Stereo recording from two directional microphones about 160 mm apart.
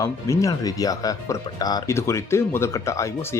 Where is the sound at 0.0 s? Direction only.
20° left (ahead or behind).